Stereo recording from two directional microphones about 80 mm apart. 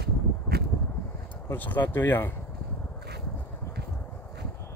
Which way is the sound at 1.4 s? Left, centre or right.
Left.